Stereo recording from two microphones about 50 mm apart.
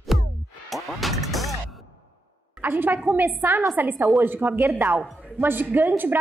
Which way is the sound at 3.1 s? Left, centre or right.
Right.